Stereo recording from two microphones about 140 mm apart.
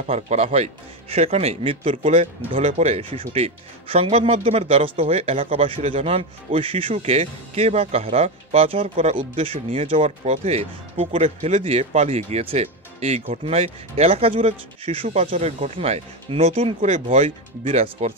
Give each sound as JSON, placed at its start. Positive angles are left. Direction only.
{"t": 0.0, "sound": "speech", "side_deg": -50}